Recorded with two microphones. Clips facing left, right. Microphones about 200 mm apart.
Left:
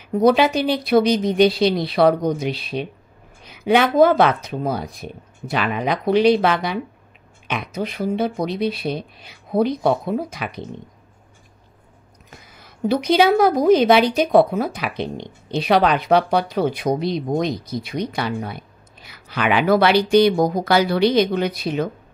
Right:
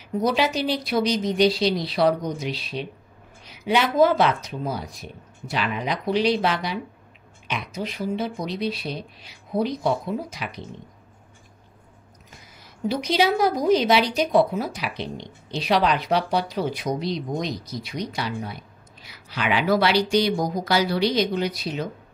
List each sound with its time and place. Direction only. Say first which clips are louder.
0.2 s a woman's voice: left 7 dB; 55° left (ahead or behind)
12.3 s a woman's voice: left 4 dB; 55° left (ahead or behind)